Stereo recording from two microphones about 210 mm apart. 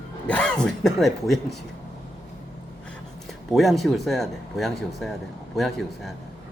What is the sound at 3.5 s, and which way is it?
Speech, centre (ahead or behind).